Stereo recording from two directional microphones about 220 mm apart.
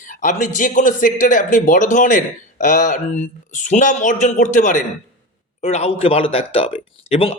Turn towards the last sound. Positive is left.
turn(degrees=25)  # may be behind; listen again after turning